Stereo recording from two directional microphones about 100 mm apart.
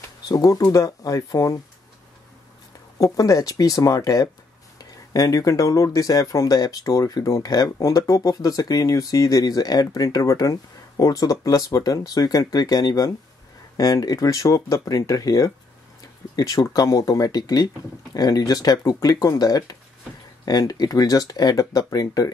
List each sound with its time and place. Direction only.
0.3 s speech: 35° left (ahead or behind)
3.0 s speech: 35° left (ahead or behind)